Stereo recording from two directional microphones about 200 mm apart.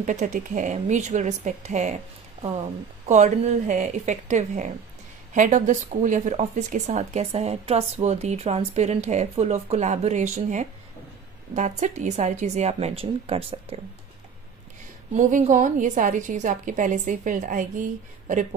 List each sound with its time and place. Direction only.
0.0 s speech: 40° right (ahead or behind)
3.1 s speech: 35° right (ahead or behind)
15.1 s speech: 40° right (ahead or behind)